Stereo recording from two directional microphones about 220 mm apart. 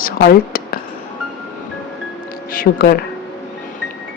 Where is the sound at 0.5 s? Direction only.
40° left (ahead or behind).